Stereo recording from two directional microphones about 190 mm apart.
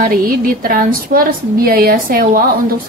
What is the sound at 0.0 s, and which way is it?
A woman's voice, 50° right (ahead or behind).